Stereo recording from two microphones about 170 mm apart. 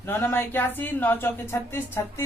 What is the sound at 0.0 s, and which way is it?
Speech, 15° left (ahead or behind).